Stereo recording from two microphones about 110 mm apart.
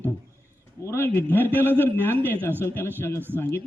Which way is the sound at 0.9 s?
20° left (ahead or behind).